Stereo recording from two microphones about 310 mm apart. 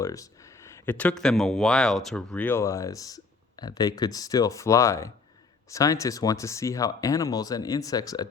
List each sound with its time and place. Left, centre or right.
0.0 s speech: centre